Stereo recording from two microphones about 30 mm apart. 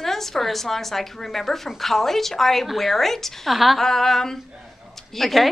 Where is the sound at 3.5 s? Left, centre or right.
Centre.